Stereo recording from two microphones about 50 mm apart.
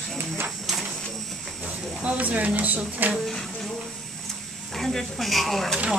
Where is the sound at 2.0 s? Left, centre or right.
Right.